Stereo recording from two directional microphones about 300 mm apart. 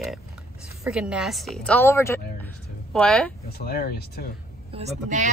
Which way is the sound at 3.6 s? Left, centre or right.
Left.